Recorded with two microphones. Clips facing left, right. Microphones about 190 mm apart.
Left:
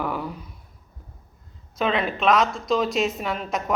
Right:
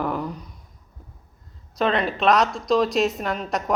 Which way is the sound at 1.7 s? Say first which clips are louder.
Right 2 dB; centre (ahead or behind).